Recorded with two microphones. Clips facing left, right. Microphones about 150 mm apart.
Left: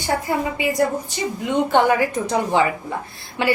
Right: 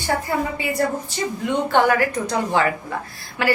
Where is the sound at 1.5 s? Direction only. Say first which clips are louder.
Left 1 dB; 15° left (ahead or behind).